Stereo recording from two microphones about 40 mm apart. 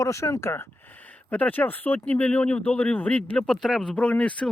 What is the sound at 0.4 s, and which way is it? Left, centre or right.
Speech, left.